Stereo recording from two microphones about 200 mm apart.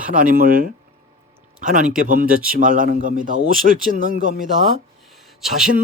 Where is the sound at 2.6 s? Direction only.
40° right (ahead or behind).